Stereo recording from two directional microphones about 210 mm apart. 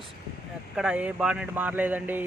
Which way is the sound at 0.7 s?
5° right (ahead or behind).